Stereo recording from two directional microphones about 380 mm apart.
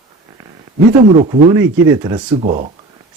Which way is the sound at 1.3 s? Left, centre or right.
Centre.